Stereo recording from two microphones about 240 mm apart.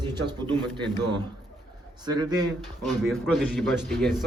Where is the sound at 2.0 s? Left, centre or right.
Centre.